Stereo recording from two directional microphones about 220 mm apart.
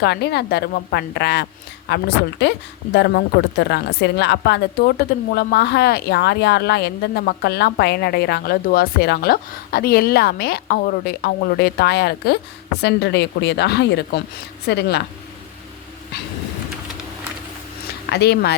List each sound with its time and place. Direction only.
0.0 s a woman's voice: 50° left (ahead or behind)
18.0 s speech: 50° left (ahead or behind)